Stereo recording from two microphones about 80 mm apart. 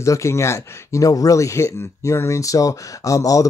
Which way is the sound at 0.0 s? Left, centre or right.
Left.